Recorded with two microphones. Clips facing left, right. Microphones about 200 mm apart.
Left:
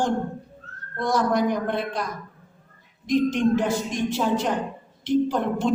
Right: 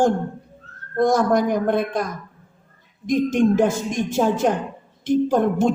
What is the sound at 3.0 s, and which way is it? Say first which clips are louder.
A woman's voice: right 3 dB; 45° right (ahead or behind).